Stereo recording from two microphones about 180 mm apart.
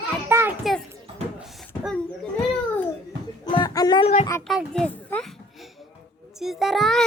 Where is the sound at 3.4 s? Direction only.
25° left (ahead or behind).